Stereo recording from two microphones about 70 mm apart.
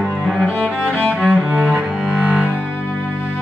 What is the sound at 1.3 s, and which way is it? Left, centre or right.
Cello, centre.